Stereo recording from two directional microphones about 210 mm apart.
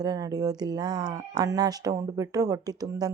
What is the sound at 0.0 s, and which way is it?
Speech, 20° right (ahead or behind).